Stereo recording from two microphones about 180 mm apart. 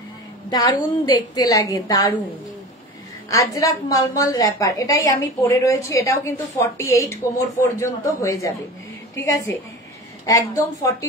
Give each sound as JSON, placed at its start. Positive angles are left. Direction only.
{"t": 0.5, "sound": "a woman's voice", "side_deg": 20}
{"t": 3.3, "sound": "a woman's voice", "side_deg": 20}